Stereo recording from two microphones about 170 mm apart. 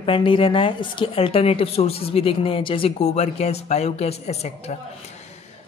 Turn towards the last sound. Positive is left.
turn(degrees=40)  # may be behind; listen again after turning